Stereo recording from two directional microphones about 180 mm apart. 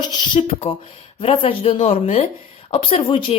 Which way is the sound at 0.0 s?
25° left (ahead or behind).